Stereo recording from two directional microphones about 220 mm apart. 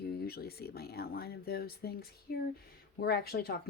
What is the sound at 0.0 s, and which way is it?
A woman's voice, 45° left (ahead or behind).